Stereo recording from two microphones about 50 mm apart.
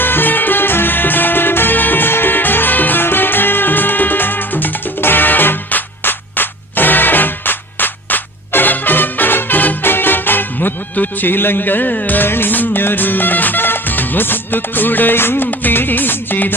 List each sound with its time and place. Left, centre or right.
0.0 s music: left